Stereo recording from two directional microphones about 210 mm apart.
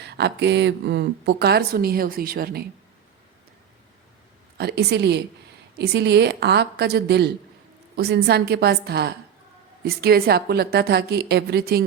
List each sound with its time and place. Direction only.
0.0 s speech: 50° right (ahead or behind)
4.5 s speech: 50° right (ahead or behind)